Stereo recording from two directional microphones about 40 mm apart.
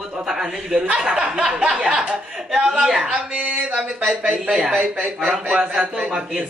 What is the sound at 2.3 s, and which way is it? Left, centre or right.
Speech, centre.